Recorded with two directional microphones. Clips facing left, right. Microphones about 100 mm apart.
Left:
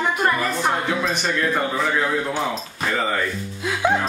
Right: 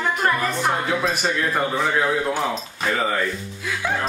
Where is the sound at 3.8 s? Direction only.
15° left (ahead or behind).